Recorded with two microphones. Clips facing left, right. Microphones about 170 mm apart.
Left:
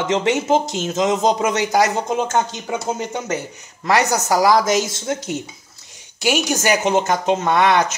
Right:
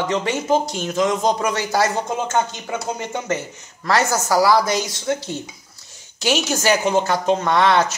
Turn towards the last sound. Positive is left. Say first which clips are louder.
# left 1 dB
turn(degrees=15)  # may be behind; listen again after turning